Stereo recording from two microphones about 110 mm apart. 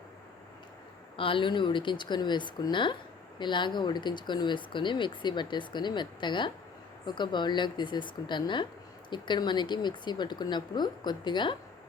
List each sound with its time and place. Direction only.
1.1 s speech: 50° left (ahead or behind)